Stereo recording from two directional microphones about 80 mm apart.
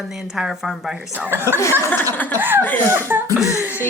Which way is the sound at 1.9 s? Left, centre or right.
Left.